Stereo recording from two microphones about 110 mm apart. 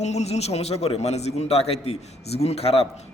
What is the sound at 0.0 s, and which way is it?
A man's voice, 90° left.